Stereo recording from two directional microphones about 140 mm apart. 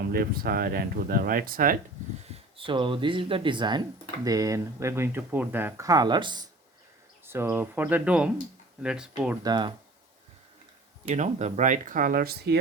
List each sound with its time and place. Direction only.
0.1 s speech: 90° right
2.6 s speech: 35° right (ahead or behind)
7.3 s speech: 15° right (ahead or behind)
9.4 s speech: 30° right (ahead or behind)
11.1 s speech: 55° right (ahead or behind); by 12.4 s 90° right